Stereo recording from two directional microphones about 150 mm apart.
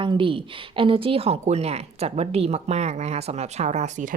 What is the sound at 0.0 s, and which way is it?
Speech, 35° right (ahead or behind).